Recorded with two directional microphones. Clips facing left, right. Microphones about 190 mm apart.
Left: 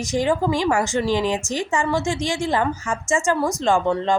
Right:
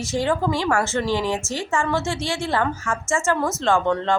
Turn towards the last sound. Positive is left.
turn(degrees=10)  # may be behind; listen again after turning